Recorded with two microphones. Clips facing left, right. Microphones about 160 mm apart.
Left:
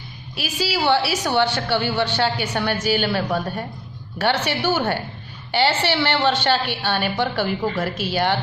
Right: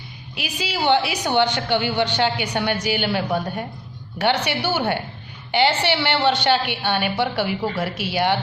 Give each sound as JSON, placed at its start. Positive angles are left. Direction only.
{"t": 0.3, "sound": "a woman's voice", "side_deg": -20}